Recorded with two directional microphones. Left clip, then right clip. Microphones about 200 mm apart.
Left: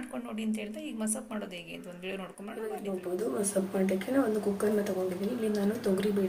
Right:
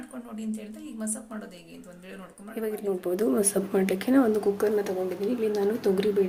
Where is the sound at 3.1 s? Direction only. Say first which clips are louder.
Right 4 dB; 50° right (ahead or behind).